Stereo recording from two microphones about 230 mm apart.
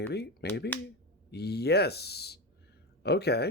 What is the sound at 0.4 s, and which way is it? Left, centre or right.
Speech, left.